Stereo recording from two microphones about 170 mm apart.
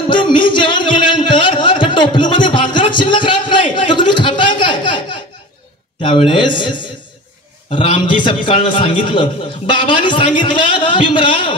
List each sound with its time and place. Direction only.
0.1 s music: 30° left (ahead or behind)
3.7 s a sound: 30° left (ahead or behind)
6.0 s a man's voice: 30° left (ahead or behind)